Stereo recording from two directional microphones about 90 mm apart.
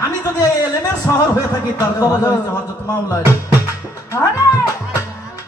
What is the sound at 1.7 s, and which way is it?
Speech, 45° left (ahead or behind).